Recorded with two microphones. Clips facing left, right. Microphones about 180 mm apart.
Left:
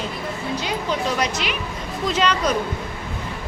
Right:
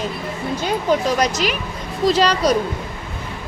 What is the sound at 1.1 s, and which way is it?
Speech, 40° right (ahead or behind).